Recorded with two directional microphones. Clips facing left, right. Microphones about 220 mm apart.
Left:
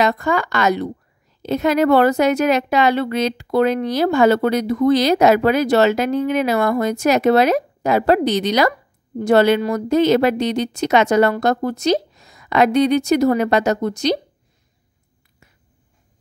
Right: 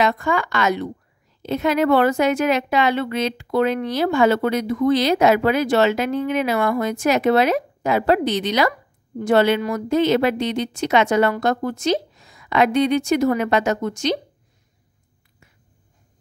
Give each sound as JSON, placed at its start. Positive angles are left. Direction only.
{"t": 0.0, "sound": "a woman's voice", "side_deg": 40}